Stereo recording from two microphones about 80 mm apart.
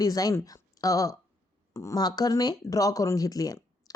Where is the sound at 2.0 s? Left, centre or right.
Left.